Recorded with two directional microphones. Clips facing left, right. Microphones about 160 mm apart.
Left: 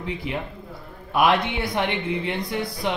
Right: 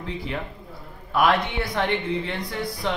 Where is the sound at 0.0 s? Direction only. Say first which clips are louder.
Left 2 dB; 15° left (ahead or behind).